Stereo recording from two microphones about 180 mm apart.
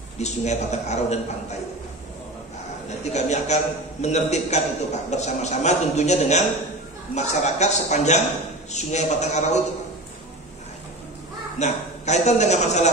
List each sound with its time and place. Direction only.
0.2 s a man's voice: 40° left (ahead or behind)
3.0 s a man's voice: 40° left (ahead or behind)
11.5 s a man's voice: 40° left (ahead or behind)